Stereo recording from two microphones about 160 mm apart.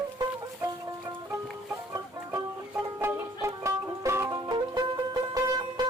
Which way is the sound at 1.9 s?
15° right (ahead or behind).